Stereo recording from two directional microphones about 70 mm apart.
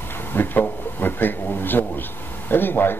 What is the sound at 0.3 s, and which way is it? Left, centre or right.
Speech, left.